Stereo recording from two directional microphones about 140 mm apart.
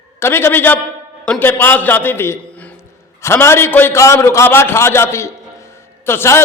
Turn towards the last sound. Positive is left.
turn(degrees=15)  # may be behind; listen again after turning